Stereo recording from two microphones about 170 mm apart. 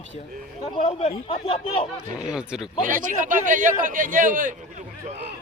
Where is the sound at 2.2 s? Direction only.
5° right (ahead or behind).